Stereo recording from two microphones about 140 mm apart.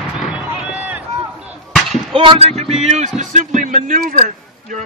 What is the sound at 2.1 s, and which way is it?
A man's voice, 45° right (ahead or behind).